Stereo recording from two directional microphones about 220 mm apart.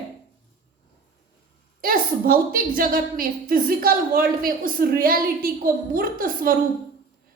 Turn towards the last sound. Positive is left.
turn(degrees=-40)  # may be behind; listen again after turning